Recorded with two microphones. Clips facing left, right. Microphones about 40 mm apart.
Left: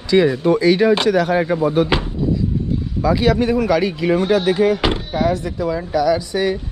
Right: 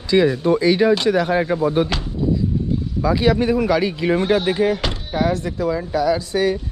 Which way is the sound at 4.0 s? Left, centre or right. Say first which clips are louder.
Left 1 dB; right.